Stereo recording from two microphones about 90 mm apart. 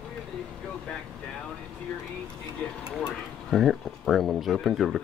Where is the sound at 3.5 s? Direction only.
5° right (ahead or behind).